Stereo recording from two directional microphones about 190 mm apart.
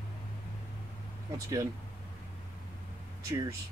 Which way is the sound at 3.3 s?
15° right (ahead or behind).